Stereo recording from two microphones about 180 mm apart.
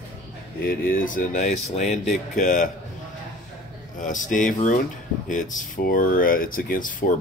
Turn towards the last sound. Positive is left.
turn(degrees=45)  # may be behind; listen again after turning